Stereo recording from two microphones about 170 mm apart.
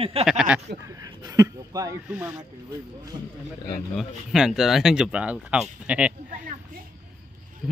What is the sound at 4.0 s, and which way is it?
Speech, 5° right (ahead or behind).